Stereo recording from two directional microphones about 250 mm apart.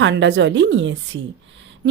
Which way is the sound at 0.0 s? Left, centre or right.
Right.